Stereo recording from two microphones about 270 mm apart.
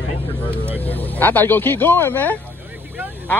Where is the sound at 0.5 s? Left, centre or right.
Centre.